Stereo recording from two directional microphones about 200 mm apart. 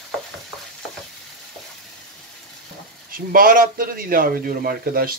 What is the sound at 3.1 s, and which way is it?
A man's voice, 45° right (ahead or behind).